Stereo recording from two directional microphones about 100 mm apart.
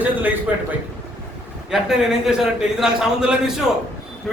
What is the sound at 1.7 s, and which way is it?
Speech, 5° right (ahead or behind).